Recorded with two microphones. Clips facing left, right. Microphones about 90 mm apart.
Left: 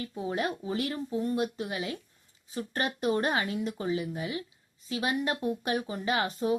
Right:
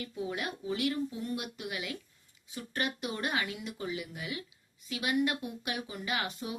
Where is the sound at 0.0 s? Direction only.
35° left (ahead or behind).